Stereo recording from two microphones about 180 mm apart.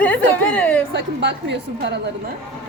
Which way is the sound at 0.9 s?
75° right (ahead or behind).